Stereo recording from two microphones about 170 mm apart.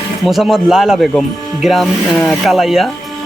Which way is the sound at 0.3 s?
Centre (ahead or behind).